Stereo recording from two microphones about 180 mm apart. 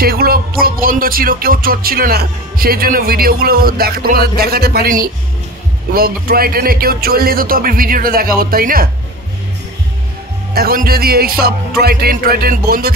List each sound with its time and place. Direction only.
0.0 s music: 55° right (ahead or behind)
4.4 s speech: 60° right (ahead or behind)
10.5 s speech: 55° right (ahead or behind)